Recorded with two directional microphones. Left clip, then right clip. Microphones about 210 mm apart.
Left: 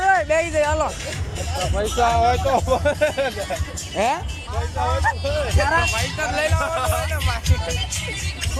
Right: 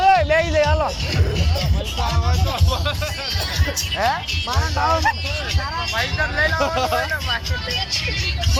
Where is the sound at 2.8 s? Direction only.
40° left (ahead or behind).